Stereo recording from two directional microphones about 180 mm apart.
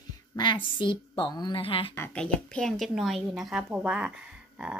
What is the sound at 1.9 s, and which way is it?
A woman's voice, 10° left (ahead or behind).